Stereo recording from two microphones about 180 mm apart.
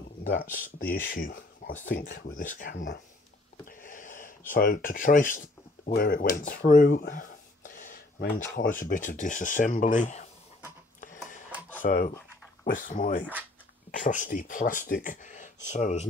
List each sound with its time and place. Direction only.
0.2 s speech: 55° left (ahead or behind)
3.8 s a sound: 45° left (ahead or behind)
4.5 s speech: 50° left (ahead or behind)
7.0 s a sound: 45° left (ahead or behind)
8.5 s speech: 50° left (ahead or behind)
11.8 s speech: 50° left (ahead or behind)